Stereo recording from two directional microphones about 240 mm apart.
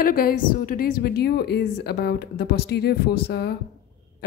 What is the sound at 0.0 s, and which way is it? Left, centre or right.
A woman's voice, left.